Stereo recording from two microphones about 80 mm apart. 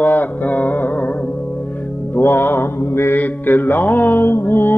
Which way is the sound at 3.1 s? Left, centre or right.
Left.